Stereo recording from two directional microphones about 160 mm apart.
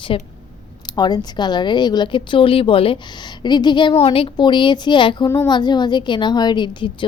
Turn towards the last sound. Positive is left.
turn(degrees=30)  # may be behind; listen again after turning